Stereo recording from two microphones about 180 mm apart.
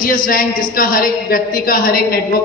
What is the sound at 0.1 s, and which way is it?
A woman's voice, 50° left (ahead or behind).